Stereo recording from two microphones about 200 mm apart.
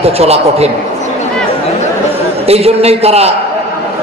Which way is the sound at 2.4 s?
30° right (ahead or behind).